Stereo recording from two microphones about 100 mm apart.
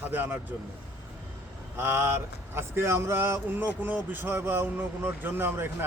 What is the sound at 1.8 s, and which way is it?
Speech, 20° right (ahead or behind).